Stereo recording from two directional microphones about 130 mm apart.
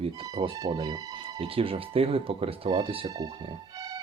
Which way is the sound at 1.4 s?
45° right (ahead or behind).